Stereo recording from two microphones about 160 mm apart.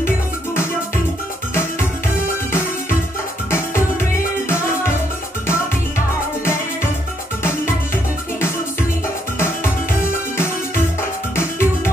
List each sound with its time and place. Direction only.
1.5 s music: 15° left (ahead or behind)
3.4 s music: 15° left (ahead or behind)
11.0 s music: 15° left (ahead or behind)